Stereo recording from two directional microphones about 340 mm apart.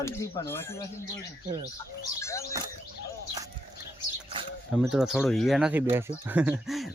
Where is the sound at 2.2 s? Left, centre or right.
Centre.